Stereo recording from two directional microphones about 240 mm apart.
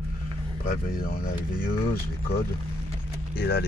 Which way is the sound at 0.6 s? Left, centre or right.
Left.